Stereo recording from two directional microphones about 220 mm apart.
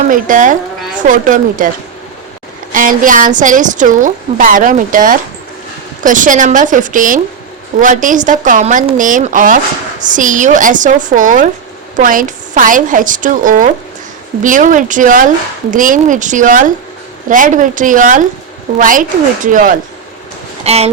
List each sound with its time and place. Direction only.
0.1 s a woman's voice: 35° right (ahead or behind)
2.7 s a woman's voice: 40° right (ahead or behind)